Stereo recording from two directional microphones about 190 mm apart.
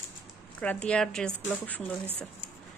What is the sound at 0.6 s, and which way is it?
A woman's voice, 5° left (ahead or behind).